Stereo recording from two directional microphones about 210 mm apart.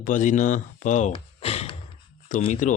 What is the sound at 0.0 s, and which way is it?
Speech, 40° left (ahead or behind).